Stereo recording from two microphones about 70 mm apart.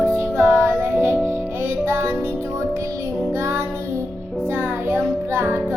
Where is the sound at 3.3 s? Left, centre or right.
Right.